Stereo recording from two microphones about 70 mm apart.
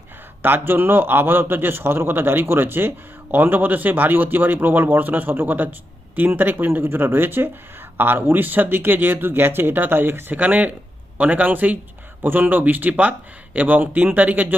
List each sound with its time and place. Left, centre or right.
0.4 s a man's voice: right